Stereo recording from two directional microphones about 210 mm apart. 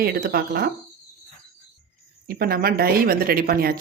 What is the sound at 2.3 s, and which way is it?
Speech, 45° right (ahead or behind).